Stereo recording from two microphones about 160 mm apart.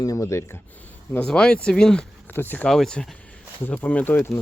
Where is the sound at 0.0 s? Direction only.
20° left (ahead or behind).